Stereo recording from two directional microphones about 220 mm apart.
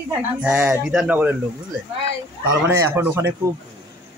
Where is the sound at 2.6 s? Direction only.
10° right (ahead or behind).